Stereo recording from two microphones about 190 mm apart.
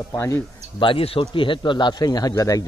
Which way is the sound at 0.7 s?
30° left (ahead or behind).